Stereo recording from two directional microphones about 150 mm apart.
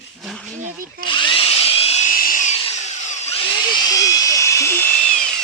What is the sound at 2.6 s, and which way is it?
Tools, 45° left (ahead or behind).